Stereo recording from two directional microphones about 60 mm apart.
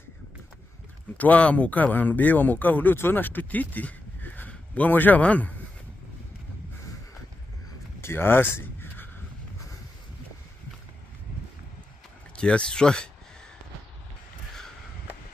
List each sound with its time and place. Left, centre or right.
1.1 s speech: left
8.0 s a sound: left
12.4 s speech: centre